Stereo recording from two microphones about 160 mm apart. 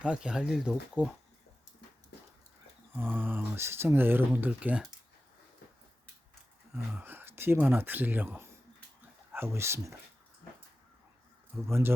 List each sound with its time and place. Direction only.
0.0 s speech: 5° right (ahead or behind)
2.9 s speech: 15° right (ahead or behind)
7.0 s speech: 15° right (ahead or behind)
11.5 s speech: 15° right (ahead or behind)